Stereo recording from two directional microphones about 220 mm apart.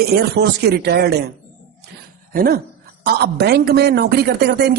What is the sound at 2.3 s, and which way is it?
A man's voice, 40° right (ahead or behind).